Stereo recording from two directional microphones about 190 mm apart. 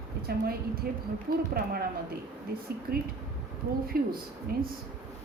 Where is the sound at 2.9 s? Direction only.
55° right (ahead or behind).